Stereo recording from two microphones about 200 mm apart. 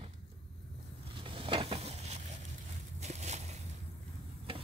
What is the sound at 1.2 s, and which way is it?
Stir, 25° right (ahead or behind).